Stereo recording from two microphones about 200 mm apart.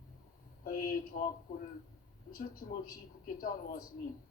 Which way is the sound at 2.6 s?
45° left (ahead or behind).